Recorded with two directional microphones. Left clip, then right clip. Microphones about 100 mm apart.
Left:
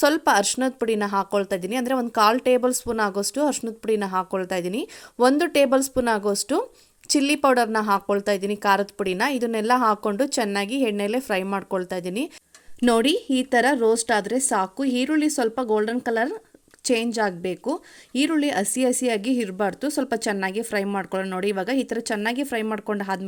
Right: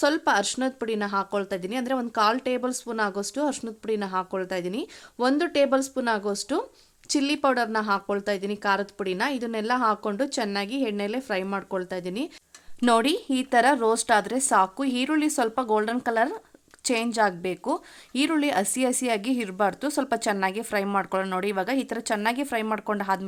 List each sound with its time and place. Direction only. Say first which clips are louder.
0.0 s a woman's voice: left 4 dB; 35° left (ahead or behind)